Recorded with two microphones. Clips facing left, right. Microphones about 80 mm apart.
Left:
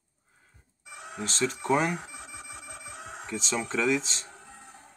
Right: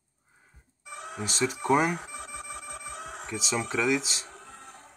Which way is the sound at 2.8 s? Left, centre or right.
Centre.